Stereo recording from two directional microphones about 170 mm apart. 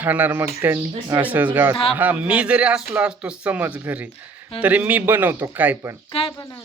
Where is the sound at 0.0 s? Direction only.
10° right (ahead or behind).